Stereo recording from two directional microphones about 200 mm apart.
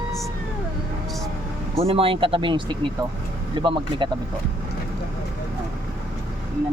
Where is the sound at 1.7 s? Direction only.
30° right (ahead or behind).